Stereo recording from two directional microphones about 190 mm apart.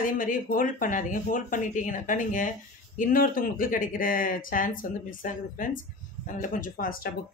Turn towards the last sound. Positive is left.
turn(degrees=50)  # may be behind; listen again after turning